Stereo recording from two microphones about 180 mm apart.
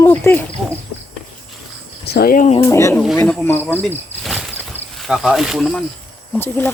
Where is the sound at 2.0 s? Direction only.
60° left (ahead or behind).